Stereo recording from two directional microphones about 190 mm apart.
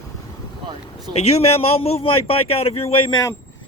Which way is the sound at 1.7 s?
30° left (ahead or behind).